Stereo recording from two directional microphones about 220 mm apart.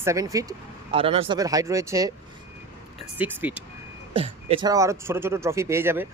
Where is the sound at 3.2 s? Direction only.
5° right (ahead or behind).